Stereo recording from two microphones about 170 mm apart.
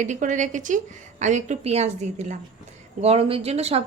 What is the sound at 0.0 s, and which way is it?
A woman's voice, 45° right (ahead or behind).